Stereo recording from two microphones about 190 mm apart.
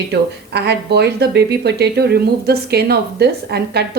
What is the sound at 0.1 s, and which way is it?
Speech, 60° right (ahead or behind).